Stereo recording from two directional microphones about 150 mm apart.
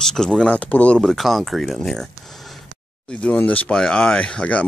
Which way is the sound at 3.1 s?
10° left (ahead or behind).